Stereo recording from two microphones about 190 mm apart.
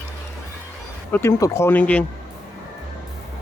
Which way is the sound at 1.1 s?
15° left (ahead or behind).